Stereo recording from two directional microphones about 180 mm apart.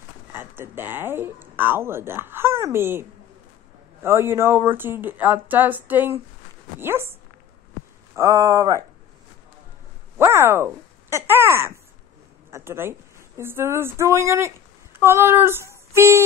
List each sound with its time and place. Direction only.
0.3 s speech: 10° right (ahead or behind)
8.2 s speech: 15° right (ahead or behind)
10.1 s speech: 15° right (ahead or behind)